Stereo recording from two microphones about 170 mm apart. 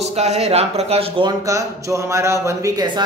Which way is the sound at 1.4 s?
20° right (ahead or behind).